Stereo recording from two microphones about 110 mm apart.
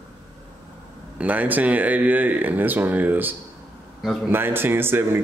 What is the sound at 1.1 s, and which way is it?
Speech, 15° right (ahead or behind).